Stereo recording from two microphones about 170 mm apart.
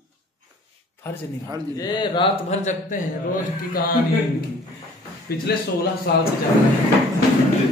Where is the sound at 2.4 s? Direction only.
45° left (ahead or behind).